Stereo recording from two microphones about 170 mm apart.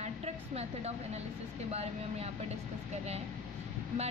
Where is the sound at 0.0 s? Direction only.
40° right (ahead or behind).